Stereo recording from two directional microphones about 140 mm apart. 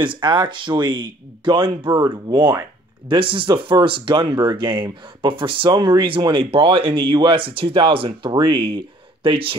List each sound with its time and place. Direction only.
0.0 s speech: 35° right (ahead or behind)